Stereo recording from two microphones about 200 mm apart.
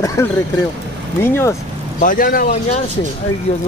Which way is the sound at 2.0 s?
45° left (ahead or behind).